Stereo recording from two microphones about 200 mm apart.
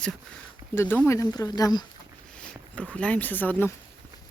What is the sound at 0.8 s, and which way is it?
Speech, 10° left (ahead or behind).